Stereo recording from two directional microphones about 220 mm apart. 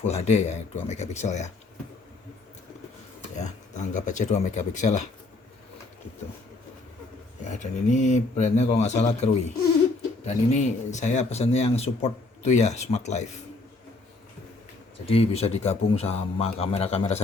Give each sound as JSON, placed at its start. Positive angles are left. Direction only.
{"t": 0.0, "sound": "speech", "side_deg": 30}
{"t": 3.3, "sound": "speech", "side_deg": 30}
{"t": 7.4, "sound": "speech", "side_deg": 35}
{"t": 15.0, "sound": "a man's voice", "side_deg": 25}